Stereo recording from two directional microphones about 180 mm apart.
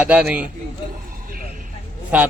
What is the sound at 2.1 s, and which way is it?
Speech, 10° right (ahead or behind).